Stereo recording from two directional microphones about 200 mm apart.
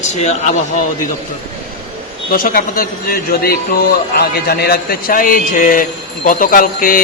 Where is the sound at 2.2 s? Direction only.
45° left (ahead or behind).